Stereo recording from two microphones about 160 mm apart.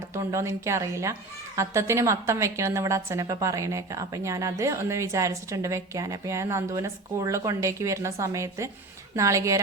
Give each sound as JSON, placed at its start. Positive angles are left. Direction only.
{"t": 0.1, "sound": "a woman's voice", "side_deg": -20}